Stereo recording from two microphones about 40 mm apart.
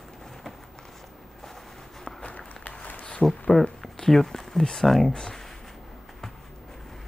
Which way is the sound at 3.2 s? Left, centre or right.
Centre.